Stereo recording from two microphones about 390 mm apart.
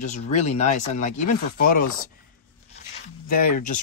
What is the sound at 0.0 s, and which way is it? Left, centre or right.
Speech, centre.